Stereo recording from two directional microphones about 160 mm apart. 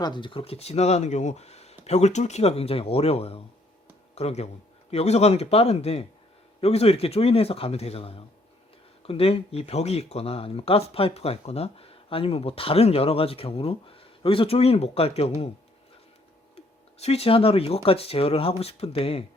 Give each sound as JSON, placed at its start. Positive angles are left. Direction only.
{"t": 0.0, "sound": "speech", "side_deg": 30}
{"t": 16.6, "sound": "speech", "side_deg": 40}